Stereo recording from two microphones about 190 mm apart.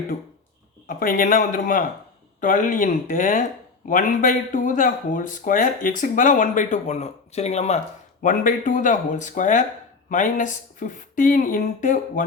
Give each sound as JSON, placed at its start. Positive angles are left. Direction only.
{"t": 0.9, "sound": "speech", "side_deg": 50}